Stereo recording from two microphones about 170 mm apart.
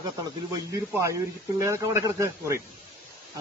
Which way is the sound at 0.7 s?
15° right (ahead or behind).